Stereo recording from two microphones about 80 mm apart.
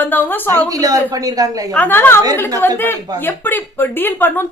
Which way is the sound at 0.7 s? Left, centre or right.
Right.